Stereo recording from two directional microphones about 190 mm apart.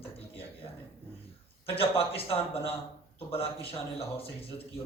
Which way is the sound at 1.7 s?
30° left (ahead or behind).